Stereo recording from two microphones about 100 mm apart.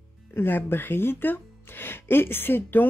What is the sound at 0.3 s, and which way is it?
Speech, 20° left (ahead or behind).